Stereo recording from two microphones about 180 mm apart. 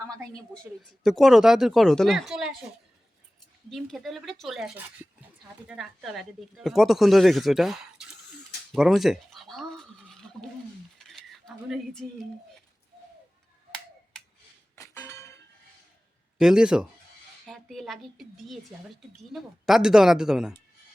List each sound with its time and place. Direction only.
1.0 s a woman's voice: centre (ahead or behind)
3.7 s a woman's voice: centre (ahead or behind)
8.7 s a sound: centre (ahead or behind)
14.8 s chink: 15° left (ahead or behind)
16.4 s a woman's voice: 5° right (ahead or behind)